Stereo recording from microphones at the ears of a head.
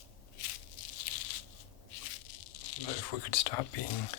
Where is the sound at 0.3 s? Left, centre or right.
Left.